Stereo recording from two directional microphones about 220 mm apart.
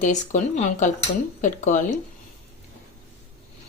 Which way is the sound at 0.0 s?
35° left (ahead or behind).